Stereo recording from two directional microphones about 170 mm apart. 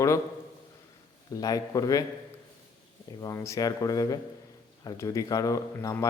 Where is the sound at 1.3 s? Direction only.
20° left (ahead or behind).